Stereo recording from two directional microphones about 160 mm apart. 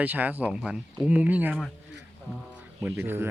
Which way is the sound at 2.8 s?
15° right (ahead or behind).